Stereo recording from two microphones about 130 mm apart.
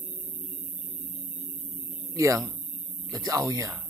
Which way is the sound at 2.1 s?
25° right (ahead or behind).